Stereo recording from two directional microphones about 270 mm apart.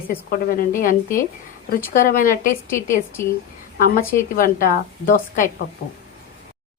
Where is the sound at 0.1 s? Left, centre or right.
Left.